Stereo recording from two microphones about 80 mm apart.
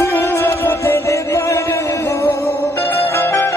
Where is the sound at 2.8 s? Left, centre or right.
Left.